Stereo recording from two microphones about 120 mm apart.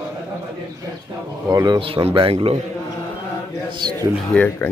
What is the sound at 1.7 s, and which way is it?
Speech, 50° right (ahead or behind).